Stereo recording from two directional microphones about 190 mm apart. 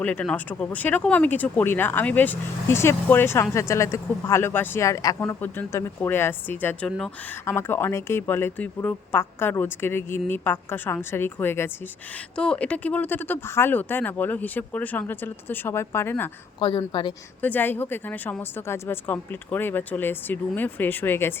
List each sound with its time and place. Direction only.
0.0 s speech: 10° left (ahead or behind)
16.6 s a woman's voice: 25° left (ahead or behind)
17.4 s speech: 10° left (ahead or behind)